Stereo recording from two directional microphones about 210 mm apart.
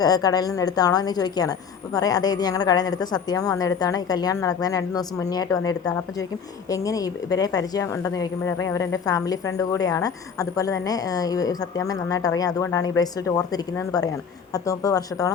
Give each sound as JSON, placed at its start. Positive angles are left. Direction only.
{"t": 0.0, "sound": "a woman's voice", "side_deg": 20}